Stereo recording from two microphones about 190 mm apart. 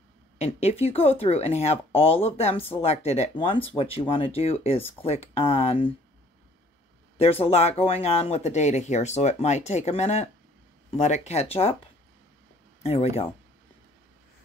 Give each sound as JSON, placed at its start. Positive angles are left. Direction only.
{"t": 0.4, "sound": "speech", "side_deg": 35}
{"t": 7.2, "sound": "speech", "side_deg": 30}
{"t": 12.8, "sound": "speech", "side_deg": 35}